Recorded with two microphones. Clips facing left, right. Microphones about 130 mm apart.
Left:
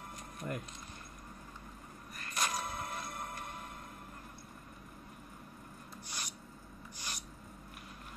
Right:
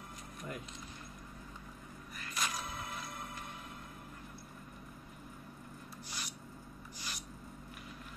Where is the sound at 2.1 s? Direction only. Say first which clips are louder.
Left 3 dB; 45° left (ahead or behind).